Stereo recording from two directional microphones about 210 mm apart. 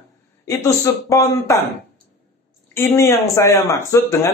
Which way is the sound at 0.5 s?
15° left (ahead or behind).